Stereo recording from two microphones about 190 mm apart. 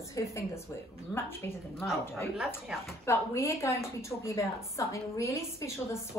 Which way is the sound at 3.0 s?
15° left (ahead or behind).